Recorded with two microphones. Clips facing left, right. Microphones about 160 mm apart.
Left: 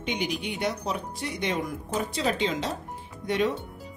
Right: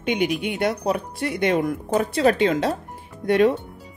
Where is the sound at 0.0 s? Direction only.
60° right (ahead or behind).